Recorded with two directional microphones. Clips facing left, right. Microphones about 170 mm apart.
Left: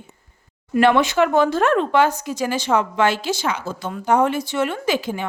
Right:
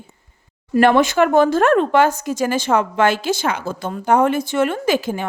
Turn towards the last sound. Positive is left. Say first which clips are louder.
# right 3 dB
turn(degrees=-45)  # may be behind; listen again after turning